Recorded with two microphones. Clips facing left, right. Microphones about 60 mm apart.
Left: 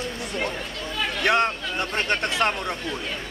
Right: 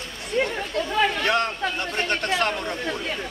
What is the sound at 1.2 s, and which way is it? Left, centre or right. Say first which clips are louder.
Speech: left 1 dB; left.